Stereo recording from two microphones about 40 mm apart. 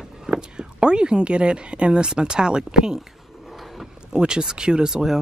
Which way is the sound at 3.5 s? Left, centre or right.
Centre.